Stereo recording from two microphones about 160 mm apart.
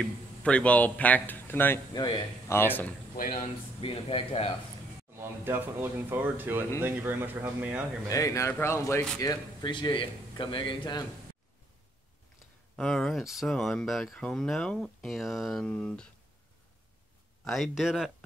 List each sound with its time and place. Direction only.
0.0 s speech: 5° left (ahead or behind)
2.0 s speech: 25° left (ahead or behind)
3.2 s speech: 60° left (ahead or behind)
3.8 s speech: 35° left (ahead or behind)
5.1 s speech: 15° right (ahead or behind)
8.1 s a man's voice: 20° left (ahead or behind)
12.7 s speech: 5° left (ahead or behind)
17.5 s speech: centre (ahead or behind)